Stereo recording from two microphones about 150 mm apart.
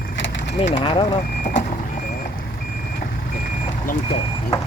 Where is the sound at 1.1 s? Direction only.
70° left (ahead or behind).